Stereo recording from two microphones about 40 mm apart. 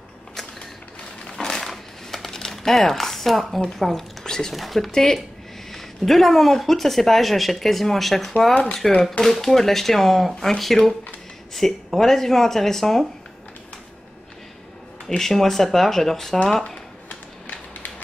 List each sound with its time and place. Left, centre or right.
1.2 s crushing: centre
2.0 s speech: centre
4.6 s speech: centre
4.9 s speech: centre
15.0 s speech: centre
16.6 s a sound: left